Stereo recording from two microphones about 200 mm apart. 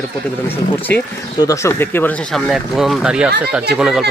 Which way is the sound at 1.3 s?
15° left (ahead or behind).